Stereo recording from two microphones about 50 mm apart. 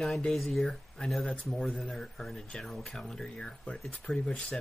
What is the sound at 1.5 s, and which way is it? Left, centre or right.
Speech, centre.